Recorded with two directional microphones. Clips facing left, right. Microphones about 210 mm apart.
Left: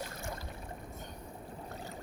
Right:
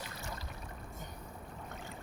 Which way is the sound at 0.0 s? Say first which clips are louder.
Left 4 dB; 50° left (ahead or behind).